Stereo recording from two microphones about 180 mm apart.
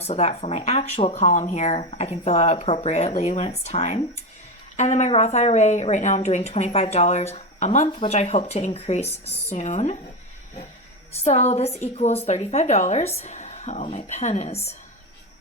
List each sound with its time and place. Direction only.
0.0 s a woman's voice: 35° left (ahead or behind)
11.2 s a woman's voice: 35° left (ahead or behind)